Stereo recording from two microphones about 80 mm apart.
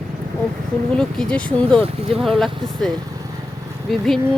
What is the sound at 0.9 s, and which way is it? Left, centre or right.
Speech, centre.